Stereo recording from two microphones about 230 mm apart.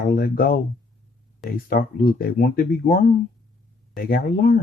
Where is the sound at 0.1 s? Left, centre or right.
Left.